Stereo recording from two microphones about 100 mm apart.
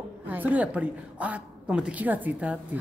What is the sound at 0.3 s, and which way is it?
A woman's voice, 15° right (ahead or behind).